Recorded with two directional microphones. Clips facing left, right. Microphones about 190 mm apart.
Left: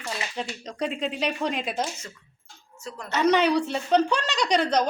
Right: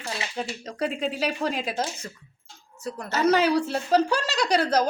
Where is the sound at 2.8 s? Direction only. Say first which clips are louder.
Right 4 dB; 35° right (ahead or behind).